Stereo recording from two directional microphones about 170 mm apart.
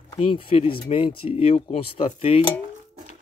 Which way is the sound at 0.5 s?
30° left (ahead or behind).